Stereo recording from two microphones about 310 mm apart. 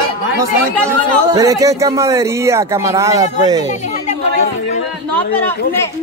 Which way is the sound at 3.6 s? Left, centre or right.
Left.